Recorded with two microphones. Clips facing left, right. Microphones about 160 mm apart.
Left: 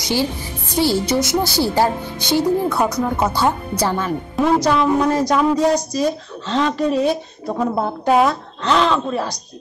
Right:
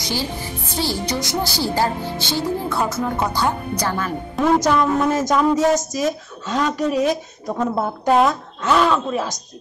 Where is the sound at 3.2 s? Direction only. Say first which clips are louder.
Left 3 dB; 25° left (ahead or behind).